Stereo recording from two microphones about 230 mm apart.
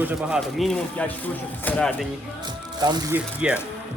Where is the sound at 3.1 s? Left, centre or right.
Centre.